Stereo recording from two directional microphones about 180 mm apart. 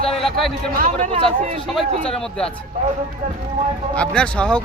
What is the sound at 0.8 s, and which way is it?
Speech, 45° right (ahead or behind).